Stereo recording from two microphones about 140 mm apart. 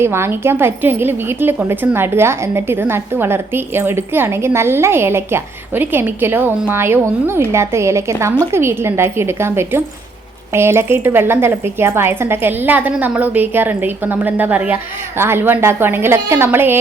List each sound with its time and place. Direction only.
0.0 s a woman's voice: 15° right (ahead or behind)